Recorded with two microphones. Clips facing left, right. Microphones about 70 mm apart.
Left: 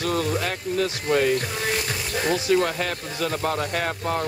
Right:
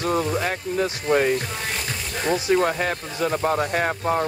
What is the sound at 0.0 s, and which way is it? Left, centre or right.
Speech, centre.